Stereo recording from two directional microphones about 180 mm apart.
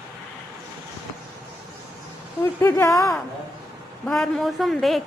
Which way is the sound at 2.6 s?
15° left (ahead or behind).